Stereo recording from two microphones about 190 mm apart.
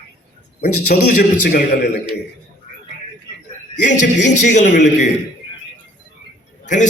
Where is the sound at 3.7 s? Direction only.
40° left (ahead or behind).